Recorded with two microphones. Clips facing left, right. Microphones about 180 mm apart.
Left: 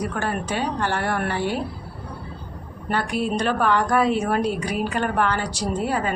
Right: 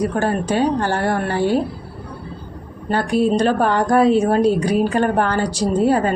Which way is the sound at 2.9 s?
35° right (ahead or behind).